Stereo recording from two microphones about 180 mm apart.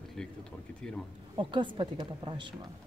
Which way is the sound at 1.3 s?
25° right (ahead or behind).